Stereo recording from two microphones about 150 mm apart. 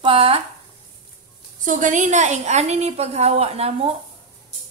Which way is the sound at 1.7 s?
55° right (ahead or behind).